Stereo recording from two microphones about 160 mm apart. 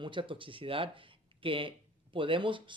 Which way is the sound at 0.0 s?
30° right (ahead or behind).